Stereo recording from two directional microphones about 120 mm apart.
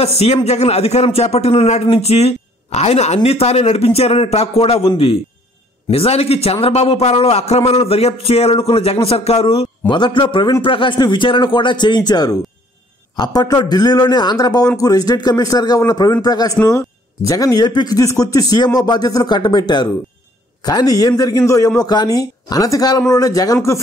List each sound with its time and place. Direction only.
0.0 s a man's voice: 60° left (ahead or behind); by 23.8 s 30° left (ahead or behind)